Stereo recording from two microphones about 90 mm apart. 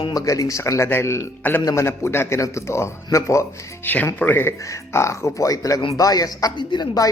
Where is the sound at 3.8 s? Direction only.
20° left (ahead or behind); by 6.5 s 45° left (ahead or behind).